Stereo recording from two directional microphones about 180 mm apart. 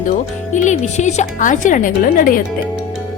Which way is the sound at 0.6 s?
40° left (ahead or behind).